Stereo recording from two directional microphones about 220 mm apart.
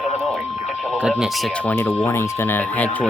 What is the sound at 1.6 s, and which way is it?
Speech, 10° left (ahead or behind).